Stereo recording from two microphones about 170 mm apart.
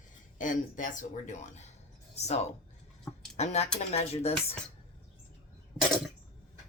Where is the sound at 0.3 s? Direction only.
50° left (ahead or behind).